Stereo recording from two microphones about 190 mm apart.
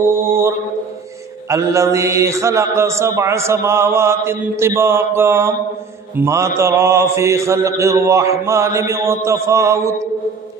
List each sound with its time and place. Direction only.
0.0 s mantra: 15° right (ahead or behind)
1.5 s a man's voice: 15° right (ahead or behind)